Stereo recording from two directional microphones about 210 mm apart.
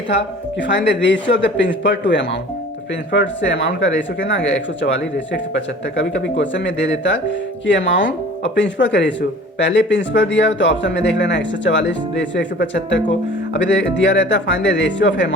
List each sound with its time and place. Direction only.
0.7 s speech: 55° left (ahead or behind)